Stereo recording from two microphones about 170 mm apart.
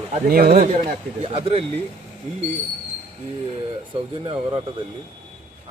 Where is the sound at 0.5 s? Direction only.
40° right (ahead or behind).